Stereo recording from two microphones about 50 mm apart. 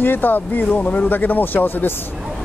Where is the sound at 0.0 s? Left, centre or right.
Left.